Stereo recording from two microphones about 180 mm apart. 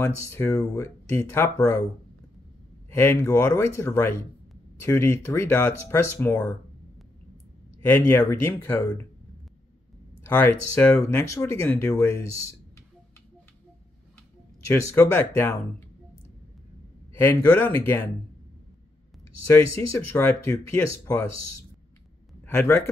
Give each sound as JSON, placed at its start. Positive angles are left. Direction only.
{"t": 0.0, "sound": "speech", "side_deg": 15}
{"t": 2.9, "sound": "speech", "side_deg": 15}
{"t": 7.8, "sound": "speech", "side_deg": 10}
{"t": 10.2, "sound": "speech", "side_deg": 10}
{"t": 14.7, "sound": "speech", "side_deg": 10}
{"t": 17.2, "sound": "speech", "side_deg": 10}
{"t": 20.1, "sound": "speech", "side_deg": 15}
{"t": 22.4, "sound": "speech", "side_deg": 15}